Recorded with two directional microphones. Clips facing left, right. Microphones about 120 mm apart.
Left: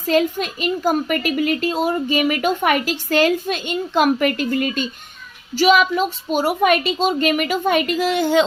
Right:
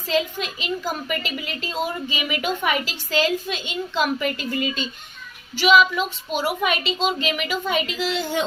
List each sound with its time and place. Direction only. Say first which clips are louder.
0.1 s a child's voice: left 6 dB; 50° left (ahead or behind)
5.5 s a child's voice: left 2 dB; 45° left (ahead or behind)